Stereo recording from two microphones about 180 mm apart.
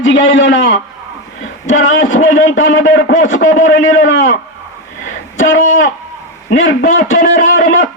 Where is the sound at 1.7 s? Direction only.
90° left.